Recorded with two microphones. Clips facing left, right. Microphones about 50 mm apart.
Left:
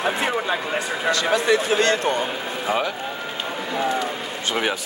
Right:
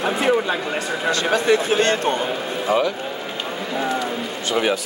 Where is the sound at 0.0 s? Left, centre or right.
Centre.